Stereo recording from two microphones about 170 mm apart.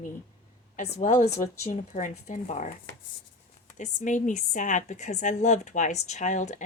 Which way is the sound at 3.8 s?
45° left (ahead or behind).